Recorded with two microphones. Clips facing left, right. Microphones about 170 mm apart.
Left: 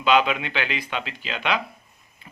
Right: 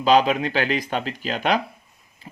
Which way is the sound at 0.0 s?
35° right (ahead or behind).